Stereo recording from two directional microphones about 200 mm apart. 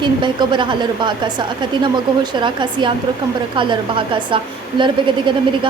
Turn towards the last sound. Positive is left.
turn(degrees=-25)  # may be behind; listen again after turning